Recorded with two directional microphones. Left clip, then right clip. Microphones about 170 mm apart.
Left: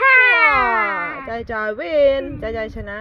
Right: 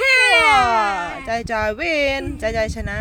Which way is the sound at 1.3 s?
65° right (ahead or behind).